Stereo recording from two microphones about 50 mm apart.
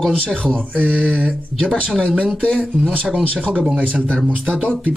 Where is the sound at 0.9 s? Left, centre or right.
Right.